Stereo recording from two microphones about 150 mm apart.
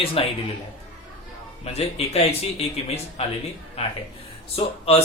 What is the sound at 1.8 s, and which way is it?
A man's voice, 45° left (ahead or behind).